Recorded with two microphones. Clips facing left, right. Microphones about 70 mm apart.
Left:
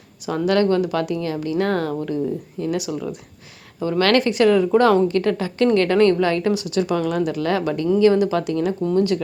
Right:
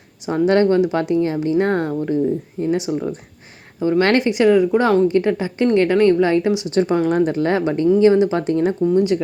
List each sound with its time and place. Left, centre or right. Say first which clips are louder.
0.3 s speech: right 3 dB; right
6.7 s speech: right 4 dB; right
8.8 s speech: right 2 dB; centre